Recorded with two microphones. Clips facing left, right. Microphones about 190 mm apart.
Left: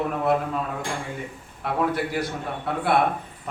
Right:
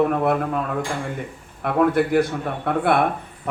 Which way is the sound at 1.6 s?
55° right (ahead or behind).